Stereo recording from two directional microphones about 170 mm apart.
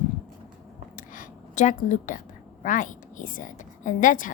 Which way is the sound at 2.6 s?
50° left (ahead or behind).